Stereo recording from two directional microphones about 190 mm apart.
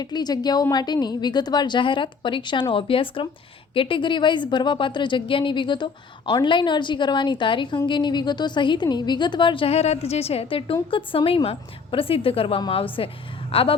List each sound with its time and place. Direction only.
0.0 s a woman's voice: 20° left (ahead or behind)